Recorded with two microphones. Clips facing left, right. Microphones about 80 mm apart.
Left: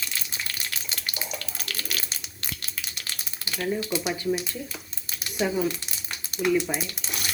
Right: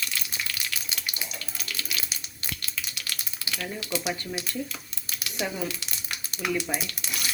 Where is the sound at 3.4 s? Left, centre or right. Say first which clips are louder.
Left 6 dB; left.